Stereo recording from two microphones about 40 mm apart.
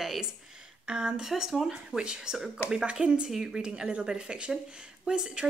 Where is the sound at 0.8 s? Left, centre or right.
Right.